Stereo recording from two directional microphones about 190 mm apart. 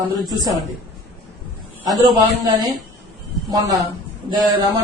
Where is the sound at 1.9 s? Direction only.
20° right (ahead or behind).